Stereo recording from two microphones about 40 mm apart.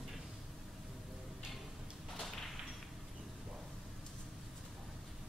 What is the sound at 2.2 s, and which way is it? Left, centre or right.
Whip, centre.